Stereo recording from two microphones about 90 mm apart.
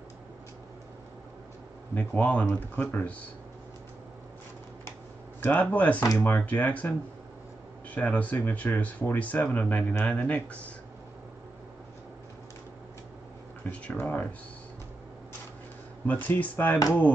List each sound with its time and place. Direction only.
2.0 s speech: 15° left (ahead or behind)
5.4 s speech: 15° left (ahead or behind)
7.9 s speech: 15° left (ahead or behind)
13.7 s speech: 15° left (ahead or behind)
16.1 s speech: 15° left (ahead or behind)